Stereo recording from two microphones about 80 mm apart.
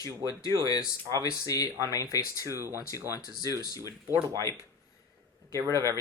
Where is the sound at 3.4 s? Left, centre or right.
Left.